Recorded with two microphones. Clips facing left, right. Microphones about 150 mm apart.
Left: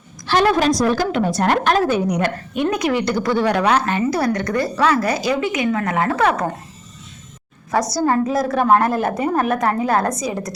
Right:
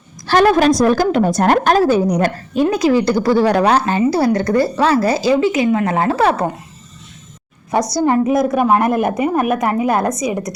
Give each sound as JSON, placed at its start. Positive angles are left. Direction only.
{"t": 0.3, "sound": "a woman's voice", "side_deg": -45}
{"t": 8.0, "sound": "a woman's voice", "side_deg": -20}